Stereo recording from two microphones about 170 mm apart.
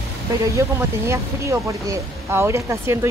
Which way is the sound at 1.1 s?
15° right (ahead or behind).